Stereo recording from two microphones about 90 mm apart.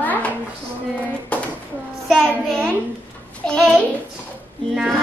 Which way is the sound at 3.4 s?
10° left (ahead or behind).